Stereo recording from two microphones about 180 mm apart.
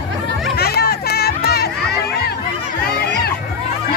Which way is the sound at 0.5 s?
60° left (ahead or behind).